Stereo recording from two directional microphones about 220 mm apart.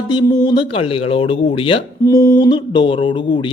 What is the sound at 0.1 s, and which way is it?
Speech, 20° left (ahead or behind).